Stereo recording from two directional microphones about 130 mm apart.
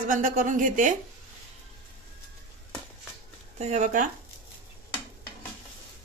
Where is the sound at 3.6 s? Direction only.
60° right (ahead or behind); by 4.1 s 80° right.